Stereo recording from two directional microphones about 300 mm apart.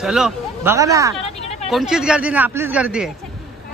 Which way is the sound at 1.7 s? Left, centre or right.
Centre.